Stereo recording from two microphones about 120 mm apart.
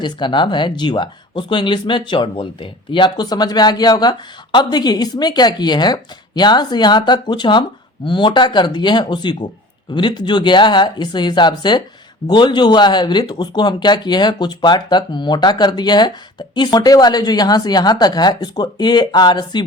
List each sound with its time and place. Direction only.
0.0 s speech: 40° left (ahead or behind)